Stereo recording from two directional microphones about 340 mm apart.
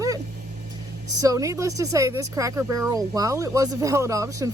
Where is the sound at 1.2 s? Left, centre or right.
Centre.